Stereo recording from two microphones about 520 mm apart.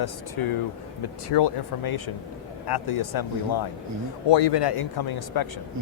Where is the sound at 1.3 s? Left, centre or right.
Left.